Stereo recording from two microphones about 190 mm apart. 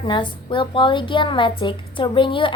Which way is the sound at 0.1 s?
25° left (ahead or behind).